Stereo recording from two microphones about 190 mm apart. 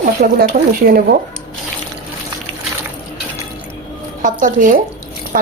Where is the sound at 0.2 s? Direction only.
55° right (ahead or behind).